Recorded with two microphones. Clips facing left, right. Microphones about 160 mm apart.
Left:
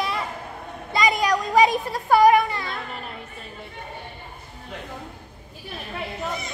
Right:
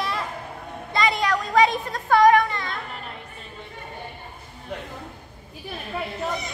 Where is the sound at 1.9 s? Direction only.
10° left (ahead or behind).